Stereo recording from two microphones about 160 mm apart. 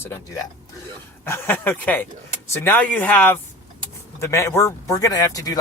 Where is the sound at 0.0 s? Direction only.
15° left (ahead or behind).